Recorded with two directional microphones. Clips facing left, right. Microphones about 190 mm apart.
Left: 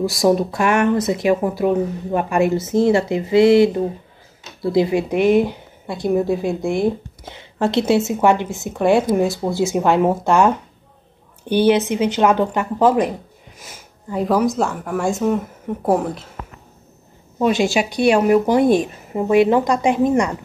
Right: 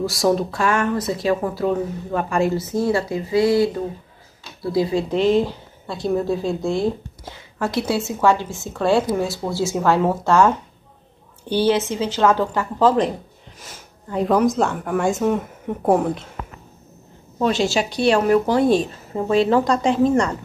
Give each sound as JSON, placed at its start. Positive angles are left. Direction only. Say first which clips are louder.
{"t": 0.0, "sound": "a woman's voice", "louder": "left 3 dB", "side_deg": 15}
{"t": 17.4, "sound": "a woman's voice", "louder": "left 2 dB", "side_deg": 15}